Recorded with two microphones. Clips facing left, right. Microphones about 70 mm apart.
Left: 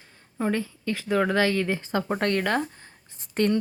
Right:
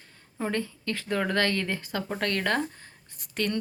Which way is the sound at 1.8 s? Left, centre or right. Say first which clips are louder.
Left 5 dB; left.